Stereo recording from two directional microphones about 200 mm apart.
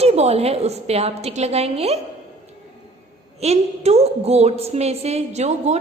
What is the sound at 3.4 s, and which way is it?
A woman's voice, 30° right (ahead or behind).